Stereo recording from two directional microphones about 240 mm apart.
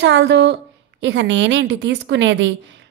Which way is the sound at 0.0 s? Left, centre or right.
Right.